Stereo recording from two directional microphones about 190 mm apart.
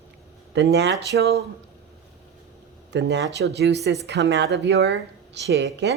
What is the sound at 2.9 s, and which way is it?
Speech, 65° right (ahead or behind).